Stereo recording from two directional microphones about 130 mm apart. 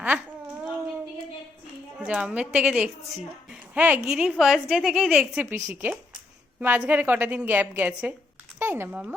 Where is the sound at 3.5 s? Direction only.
10° right (ahead or behind).